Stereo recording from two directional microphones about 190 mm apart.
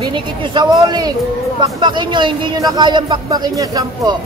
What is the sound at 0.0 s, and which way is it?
Speech, 25° right (ahead or behind).